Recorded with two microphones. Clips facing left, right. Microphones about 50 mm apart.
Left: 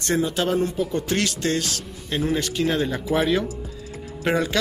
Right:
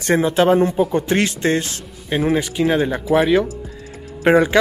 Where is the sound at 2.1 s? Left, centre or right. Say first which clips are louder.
Right 5 dB; centre.